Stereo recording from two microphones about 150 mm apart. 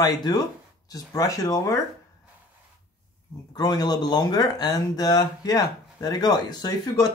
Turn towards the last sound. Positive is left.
turn(degrees=25)  # may be behind; listen again after turning